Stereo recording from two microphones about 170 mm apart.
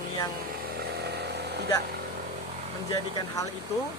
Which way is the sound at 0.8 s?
75° right (ahead or behind).